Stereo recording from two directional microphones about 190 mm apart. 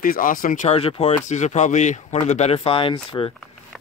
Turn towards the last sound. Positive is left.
turn(degrees=25)  # may be behind; listen again after turning